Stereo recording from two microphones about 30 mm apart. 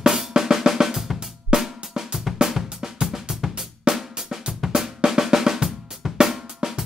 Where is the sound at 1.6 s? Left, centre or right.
Centre.